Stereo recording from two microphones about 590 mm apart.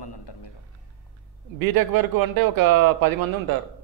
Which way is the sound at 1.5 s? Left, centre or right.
Right.